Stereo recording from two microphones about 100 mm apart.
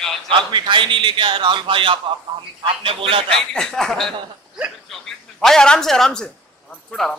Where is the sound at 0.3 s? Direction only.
50° right (ahead or behind).